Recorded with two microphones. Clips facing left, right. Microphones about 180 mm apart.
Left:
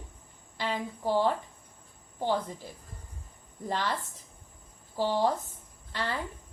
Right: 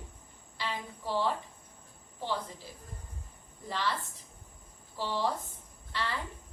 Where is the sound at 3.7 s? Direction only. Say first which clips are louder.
Left 3 dB; 45° left (ahead or behind).